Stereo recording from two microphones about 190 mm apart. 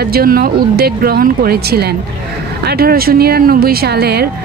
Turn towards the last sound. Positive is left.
turn(degrees=-55)  # may be behind; listen again after turning